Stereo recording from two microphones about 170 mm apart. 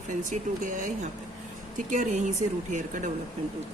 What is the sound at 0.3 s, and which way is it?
A woman's voice, 50° right (ahead or behind).